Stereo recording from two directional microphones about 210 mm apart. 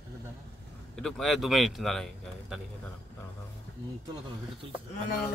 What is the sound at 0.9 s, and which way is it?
Speech, centre (ahead or behind).